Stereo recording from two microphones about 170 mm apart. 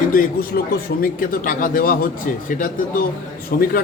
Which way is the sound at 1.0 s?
55° left (ahead or behind).